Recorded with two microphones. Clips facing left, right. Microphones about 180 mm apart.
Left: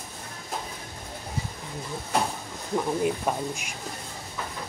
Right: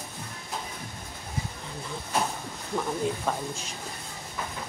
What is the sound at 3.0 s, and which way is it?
Speech, 15° left (ahead or behind).